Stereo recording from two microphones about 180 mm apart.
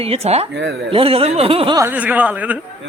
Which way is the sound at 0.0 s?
35° right (ahead or behind).